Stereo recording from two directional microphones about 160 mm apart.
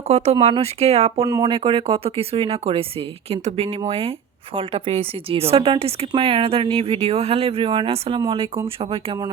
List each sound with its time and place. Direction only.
0.1 s a woman's voice: 40° right (ahead or behind)
1.3 s a woman's voice: 30° right (ahead or behind)